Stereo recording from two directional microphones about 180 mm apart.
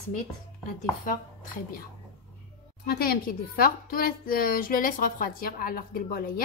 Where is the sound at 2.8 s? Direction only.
55° left (ahead or behind).